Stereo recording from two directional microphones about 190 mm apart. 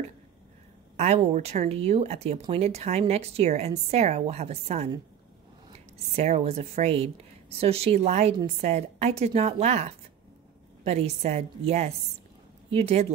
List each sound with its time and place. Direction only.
0.9 s speech: 35° right (ahead or behind)
6.1 s speech: 35° right (ahead or behind)